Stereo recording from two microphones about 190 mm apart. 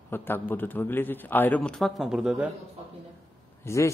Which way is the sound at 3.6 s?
15° left (ahead or behind).